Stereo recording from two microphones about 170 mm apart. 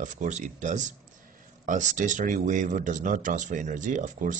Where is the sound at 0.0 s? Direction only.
45° right (ahead or behind).